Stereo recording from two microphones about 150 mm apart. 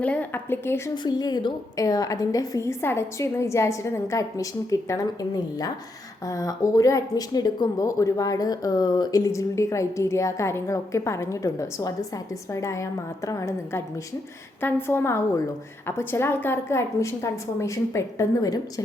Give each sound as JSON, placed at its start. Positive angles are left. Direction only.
{"t": 0.0, "sound": "a woman's voice", "side_deg": 10}
{"t": 1.0, "sound": "speech", "side_deg": 30}
{"t": 6.2, "sound": "a woman's voice", "side_deg": 20}